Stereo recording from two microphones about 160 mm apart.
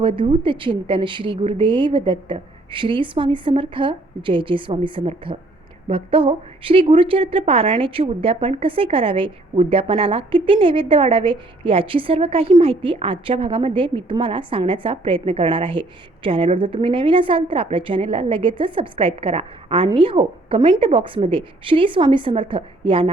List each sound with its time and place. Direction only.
0.0 s a woman's voice: 35° right (ahead or behind)